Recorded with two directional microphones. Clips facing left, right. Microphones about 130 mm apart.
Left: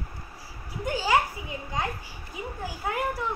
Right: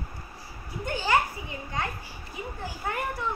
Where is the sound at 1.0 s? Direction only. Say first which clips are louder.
Left 1 dB; 15° left (ahead or behind).